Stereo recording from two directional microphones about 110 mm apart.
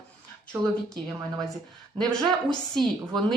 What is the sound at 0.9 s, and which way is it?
A woman's voice, 5° left (ahead or behind).